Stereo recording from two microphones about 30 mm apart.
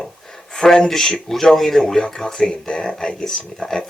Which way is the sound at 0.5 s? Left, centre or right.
Centre.